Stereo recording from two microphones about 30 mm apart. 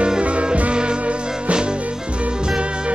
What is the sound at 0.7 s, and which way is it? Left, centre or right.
Music, right.